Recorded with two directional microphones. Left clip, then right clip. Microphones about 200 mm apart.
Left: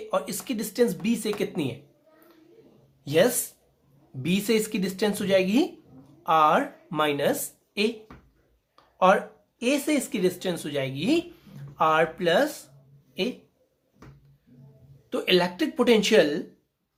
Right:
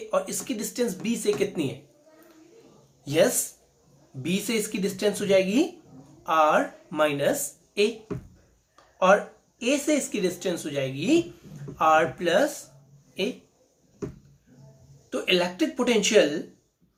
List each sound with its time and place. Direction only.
0.1 s speech: 50° left (ahead or behind)
3.0 s speech: 50° left (ahead or behind)
8.7 s a sound: 50° left (ahead or behind)
9.6 s speech: 45° left (ahead or behind)
15.1 s speech: 50° left (ahead or behind)